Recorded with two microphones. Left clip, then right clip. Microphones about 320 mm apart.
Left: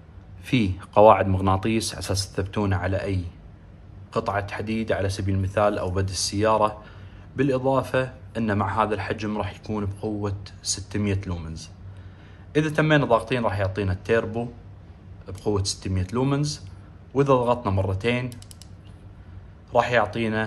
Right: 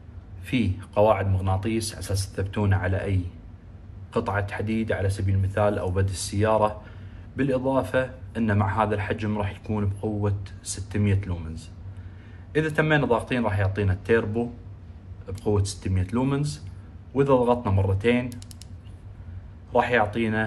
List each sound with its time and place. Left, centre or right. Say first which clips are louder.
0.5 s a man's voice: left 3 dB; centre
15.4 s a man's voice: left 1 dB; centre
19.7 s a man's voice: left 1 dB; centre